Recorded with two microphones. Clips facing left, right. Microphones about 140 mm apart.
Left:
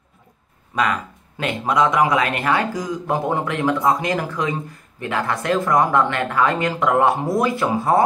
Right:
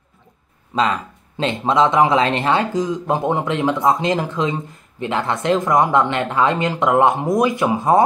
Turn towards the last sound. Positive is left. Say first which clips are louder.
# right 2 dB
turn(degrees=-20)  # may be behind; listen again after turning